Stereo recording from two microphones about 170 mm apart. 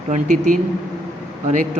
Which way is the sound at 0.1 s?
45° right (ahead or behind).